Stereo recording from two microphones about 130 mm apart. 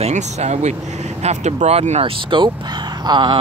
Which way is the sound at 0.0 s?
60° right (ahead or behind).